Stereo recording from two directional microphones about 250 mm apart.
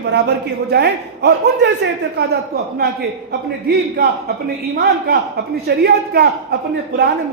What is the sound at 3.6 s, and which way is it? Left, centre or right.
Speech, right.